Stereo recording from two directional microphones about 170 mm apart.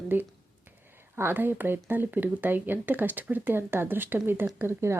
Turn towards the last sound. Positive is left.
turn(degrees=-15)  # may be behind; listen again after turning